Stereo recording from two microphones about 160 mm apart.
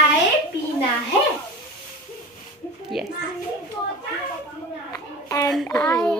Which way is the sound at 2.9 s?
Centre (ahead or behind).